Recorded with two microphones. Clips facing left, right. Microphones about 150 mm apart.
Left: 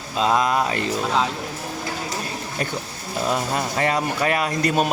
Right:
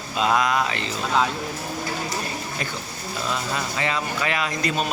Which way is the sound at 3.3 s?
50° left (ahead or behind).